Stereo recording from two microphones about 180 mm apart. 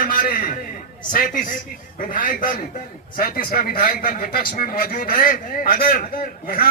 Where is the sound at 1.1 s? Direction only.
50° left (ahead or behind).